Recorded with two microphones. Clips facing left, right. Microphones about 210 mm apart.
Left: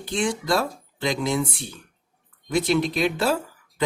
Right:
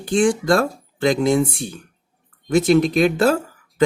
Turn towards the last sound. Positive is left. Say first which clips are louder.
# right 8 dB
turn(degrees=-50)  # may be behind; listen again after turning